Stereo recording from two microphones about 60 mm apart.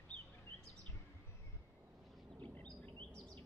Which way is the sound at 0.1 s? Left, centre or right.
Centre.